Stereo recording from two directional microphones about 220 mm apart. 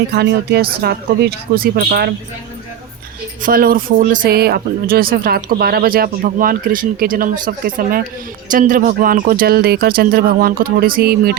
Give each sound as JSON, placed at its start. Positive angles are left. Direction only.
{"t": 0.1, "sound": "speech", "side_deg": -50}
{"t": 3.4, "sound": "speech", "side_deg": -40}